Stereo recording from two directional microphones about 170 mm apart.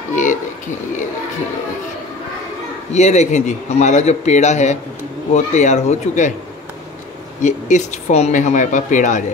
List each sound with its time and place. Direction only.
0.1 s a sound: 50° left (ahead or behind)
2.9 s a man's voice: 40° left (ahead or behind)
7.4 s a man's voice: 45° left (ahead or behind)